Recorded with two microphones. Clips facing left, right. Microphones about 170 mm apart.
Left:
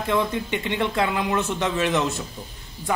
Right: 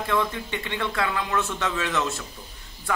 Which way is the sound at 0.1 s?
20° left (ahead or behind).